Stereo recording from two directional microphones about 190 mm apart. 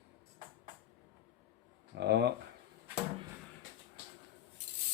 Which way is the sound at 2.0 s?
60° right (ahead or behind).